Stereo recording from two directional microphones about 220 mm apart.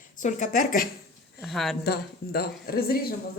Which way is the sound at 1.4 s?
Centre (ahead or behind).